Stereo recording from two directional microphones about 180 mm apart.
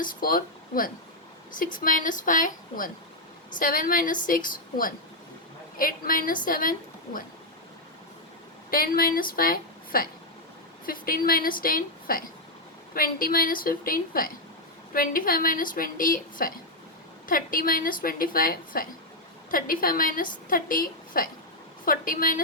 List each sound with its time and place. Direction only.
0.0 s a woman's voice: 50° left (ahead or behind)
8.7 s a woman's voice: 55° left (ahead or behind)